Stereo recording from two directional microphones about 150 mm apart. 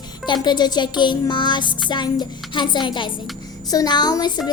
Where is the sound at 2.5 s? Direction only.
30° left (ahead or behind).